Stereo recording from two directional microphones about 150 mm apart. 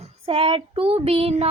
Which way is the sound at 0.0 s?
35° right (ahead or behind).